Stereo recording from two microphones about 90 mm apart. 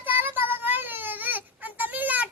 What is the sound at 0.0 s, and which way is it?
Baby cry, 20° right (ahead or behind).